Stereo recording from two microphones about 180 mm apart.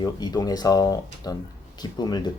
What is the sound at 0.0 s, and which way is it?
Speech, 20° left (ahead or behind).